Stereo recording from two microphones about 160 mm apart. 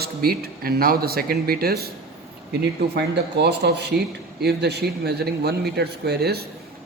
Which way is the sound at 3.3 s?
90° right.